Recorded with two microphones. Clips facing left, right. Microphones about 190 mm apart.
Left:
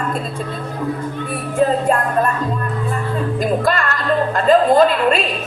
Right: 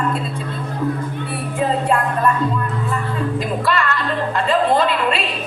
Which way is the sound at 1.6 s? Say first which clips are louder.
Left 3 dB; 45° left (ahead or behind).